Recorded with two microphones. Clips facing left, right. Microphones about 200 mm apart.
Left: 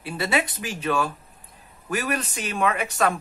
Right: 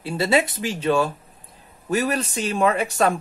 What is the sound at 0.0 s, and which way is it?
Speech, 30° right (ahead or behind).